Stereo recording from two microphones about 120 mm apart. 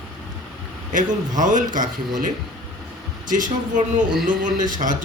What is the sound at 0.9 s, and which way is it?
Speech, 90° right.